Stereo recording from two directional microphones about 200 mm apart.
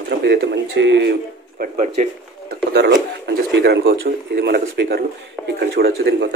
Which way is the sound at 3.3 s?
55° right (ahead or behind).